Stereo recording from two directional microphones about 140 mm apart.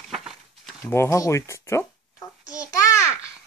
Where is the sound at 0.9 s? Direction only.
20° left (ahead or behind).